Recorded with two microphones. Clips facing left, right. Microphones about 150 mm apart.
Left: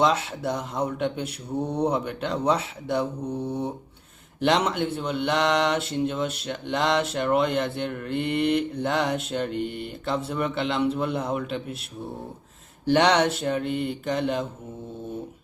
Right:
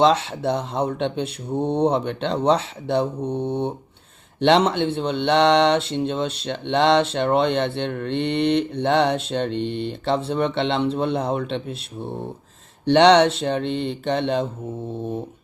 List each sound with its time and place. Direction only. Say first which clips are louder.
0.0 s speech: right 5 dB; 30° right (ahead or behind)
13.1 s speech: right 5 dB; 25° right (ahead or behind)